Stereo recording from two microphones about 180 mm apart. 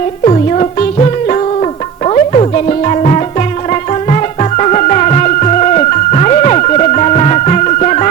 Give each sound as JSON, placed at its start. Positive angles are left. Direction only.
{"t": 0.3, "sound": "music", "side_deg": 35}
{"t": 2.0, "sound": "music", "side_deg": 35}